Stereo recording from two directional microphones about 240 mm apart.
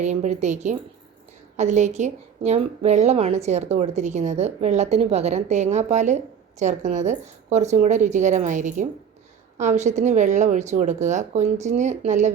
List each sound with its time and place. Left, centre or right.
0.0 s a woman's voice: right